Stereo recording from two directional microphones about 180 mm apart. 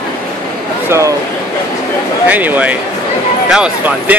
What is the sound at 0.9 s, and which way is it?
Speech, 15° right (ahead or behind).